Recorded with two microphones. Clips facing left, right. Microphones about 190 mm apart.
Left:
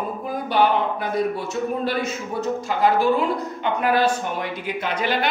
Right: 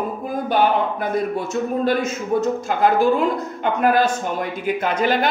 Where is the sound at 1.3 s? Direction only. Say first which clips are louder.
Right 3 dB; 45° right (ahead or behind).